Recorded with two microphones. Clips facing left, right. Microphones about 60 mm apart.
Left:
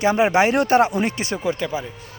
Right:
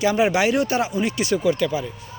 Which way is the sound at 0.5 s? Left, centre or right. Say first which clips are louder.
Left 5 dB; left.